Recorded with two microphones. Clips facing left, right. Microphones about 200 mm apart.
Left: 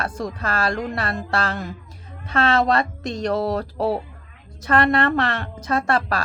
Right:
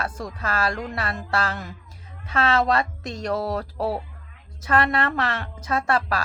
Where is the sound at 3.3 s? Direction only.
30° left (ahead or behind).